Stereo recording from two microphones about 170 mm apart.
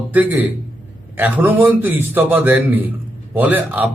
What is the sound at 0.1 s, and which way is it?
A man's voice, 10° right (ahead or behind).